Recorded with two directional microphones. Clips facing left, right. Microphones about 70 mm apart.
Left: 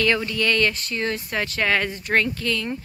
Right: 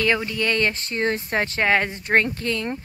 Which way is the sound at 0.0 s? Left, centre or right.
Centre.